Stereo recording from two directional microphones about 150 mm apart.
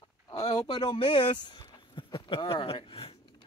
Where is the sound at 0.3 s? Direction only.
30° left (ahead or behind).